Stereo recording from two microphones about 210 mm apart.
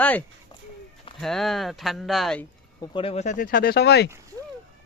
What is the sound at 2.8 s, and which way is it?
Speech, 25° left (ahead or behind).